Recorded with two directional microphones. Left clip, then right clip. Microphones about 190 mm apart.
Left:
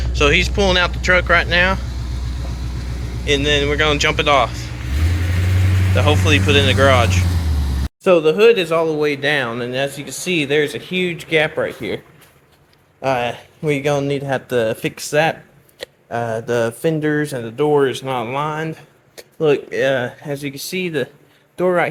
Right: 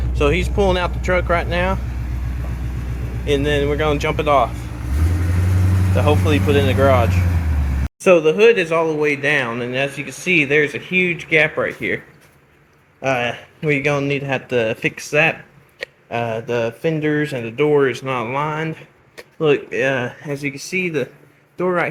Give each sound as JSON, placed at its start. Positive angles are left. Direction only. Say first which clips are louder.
{"t": 0.0, "sound": "speech", "louder": "left 4 dB", "side_deg": -5}
{"t": 3.2, "sound": "speech", "louder": "left 2 dB", "side_deg": -20}
{"t": 4.9, "sound": "vehicle", "louder": "even", "side_deg": -65}
{"t": 5.9, "sound": "speech", "louder": "left 2 dB", "side_deg": -5}
{"t": 13.0, "sound": "speech", "louder": "left 1 dB", "side_deg": -5}
{"t": 15.8, "sound": "a sound", "louder": "even", "side_deg": 0}
{"t": 16.5, "sound": "speech", "louder": "left 4 dB", "side_deg": 10}
{"t": 21.6, "sound": "speech", "louder": "left 3 dB", "side_deg": 0}